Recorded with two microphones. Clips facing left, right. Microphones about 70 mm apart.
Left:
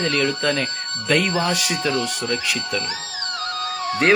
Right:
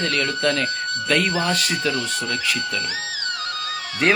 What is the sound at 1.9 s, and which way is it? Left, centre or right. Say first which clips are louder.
Speech: left 2 dB; left.